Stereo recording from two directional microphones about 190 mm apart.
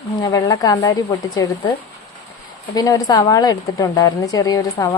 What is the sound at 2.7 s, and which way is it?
Speech, 20° left (ahead or behind).